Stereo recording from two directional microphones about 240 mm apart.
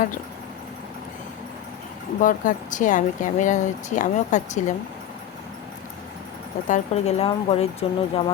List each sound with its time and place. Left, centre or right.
2.2 s speech: left
6.7 s speech: left